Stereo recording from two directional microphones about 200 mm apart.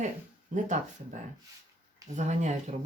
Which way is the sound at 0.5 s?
40° right (ahead or behind).